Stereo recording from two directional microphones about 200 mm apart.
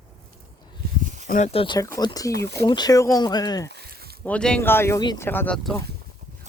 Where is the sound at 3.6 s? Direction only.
55° right (ahead or behind).